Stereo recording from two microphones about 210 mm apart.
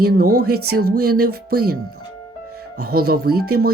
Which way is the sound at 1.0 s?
90° right.